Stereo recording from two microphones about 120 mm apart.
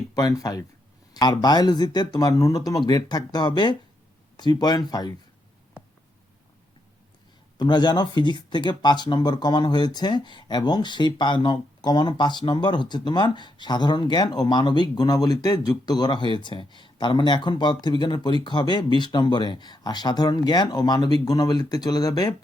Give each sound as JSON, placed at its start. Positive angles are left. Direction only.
{"t": 0.1, "sound": "speech", "side_deg": 30}
{"t": 7.6, "sound": "speech", "side_deg": 35}